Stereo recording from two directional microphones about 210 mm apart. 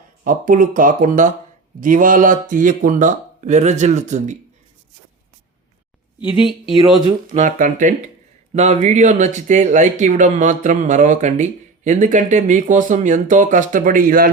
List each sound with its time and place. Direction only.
0.3 s speech: 40° right (ahead or behind)
6.1 s speech: 20° left (ahead or behind)
6.9 s speech: 20° right (ahead or behind)
7.3 s speech: 40° right (ahead or behind)